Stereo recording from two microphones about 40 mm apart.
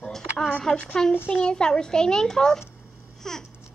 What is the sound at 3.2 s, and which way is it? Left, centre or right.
Babbling, centre.